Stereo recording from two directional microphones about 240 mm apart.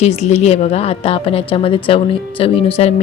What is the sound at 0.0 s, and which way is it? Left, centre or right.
Speech, left.